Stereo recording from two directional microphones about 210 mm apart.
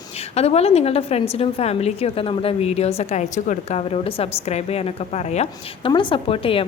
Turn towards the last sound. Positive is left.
turn(degrees=25)  # may be behind; listen again after turning